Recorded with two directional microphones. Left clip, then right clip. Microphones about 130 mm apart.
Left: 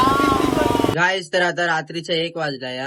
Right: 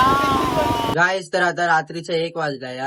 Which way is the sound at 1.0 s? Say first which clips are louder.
Even; 30° left (ahead or behind).